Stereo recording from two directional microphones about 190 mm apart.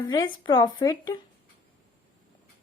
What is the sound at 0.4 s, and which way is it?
Speech, 25° left (ahead or behind).